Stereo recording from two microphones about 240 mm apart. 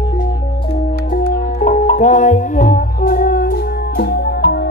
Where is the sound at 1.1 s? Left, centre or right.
Left.